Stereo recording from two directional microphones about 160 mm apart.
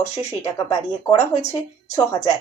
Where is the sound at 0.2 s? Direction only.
15° left (ahead or behind).